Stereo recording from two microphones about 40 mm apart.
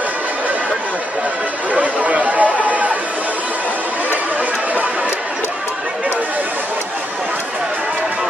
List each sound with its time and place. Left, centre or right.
1.7 s chatter: right